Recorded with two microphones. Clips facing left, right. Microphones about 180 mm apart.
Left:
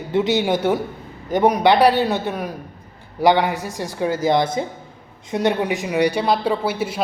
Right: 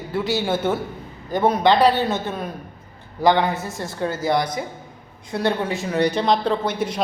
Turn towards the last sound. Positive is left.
turn(degrees=5)  # may be behind; listen again after turning